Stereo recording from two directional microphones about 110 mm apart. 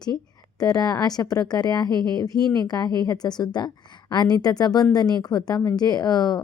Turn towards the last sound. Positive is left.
turn(degrees=35)  # may be behind; listen again after turning